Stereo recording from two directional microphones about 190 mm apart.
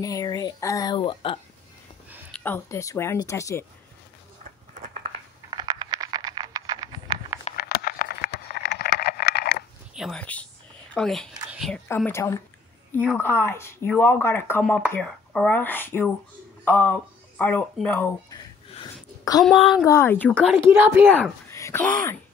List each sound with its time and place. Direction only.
0.0 s speech: 20° left (ahead or behind)
2.3 s speech: 10° left (ahead or behind)
5.5 s a sound: 25° right (ahead or behind)
7.5 s a sound: 55° left (ahead or behind)
9.9 s speech: centre (ahead or behind)
11.9 s speech: 15° left (ahead or behind)
18.7 s a sound: 25° left (ahead or behind)
19.6 s speech: 20° left (ahead or behind)
20.5 s speech: 10° right (ahead or behind)
21.1 s speech: 10° left (ahead or behind)